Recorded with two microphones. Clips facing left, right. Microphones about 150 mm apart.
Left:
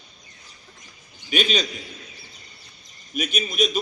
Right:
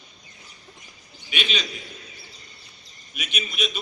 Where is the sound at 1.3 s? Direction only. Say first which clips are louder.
Left 6 dB; 40° left (ahead or behind).